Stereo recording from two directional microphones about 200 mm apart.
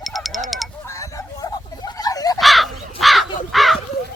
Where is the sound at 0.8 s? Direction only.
15° left (ahead or behind).